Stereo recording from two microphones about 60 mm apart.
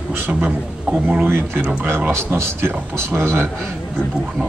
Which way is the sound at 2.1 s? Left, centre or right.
Right.